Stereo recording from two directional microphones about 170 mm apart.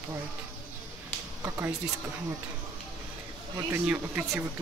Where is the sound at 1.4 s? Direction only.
15° right (ahead or behind).